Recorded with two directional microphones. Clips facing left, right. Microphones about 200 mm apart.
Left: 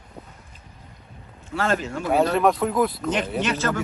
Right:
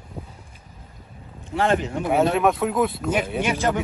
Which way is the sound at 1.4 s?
20° right (ahead or behind).